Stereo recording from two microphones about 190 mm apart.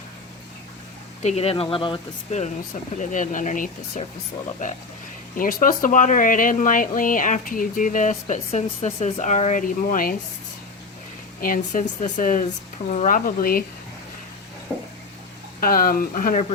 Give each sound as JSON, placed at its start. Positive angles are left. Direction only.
{"t": 1.2, "sound": "speech", "side_deg": 35}
{"t": 3.0, "sound": "speech", "side_deg": 40}
{"t": 5.4, "sound": "speech", "side_deg": 45}
{"t": 11.3, "sound": "speech", "side_deg": 45}
{"t": 14.7, "sound": "a sound", "side_deg": 0}
{"t": 15.6, "sound": "speech", "side_deg": 50}